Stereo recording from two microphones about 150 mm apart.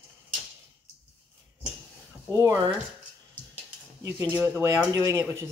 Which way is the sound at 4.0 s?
25° right (ahead or behind).